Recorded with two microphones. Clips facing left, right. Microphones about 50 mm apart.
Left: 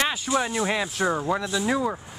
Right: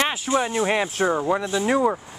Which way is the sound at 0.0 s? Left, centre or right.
Right.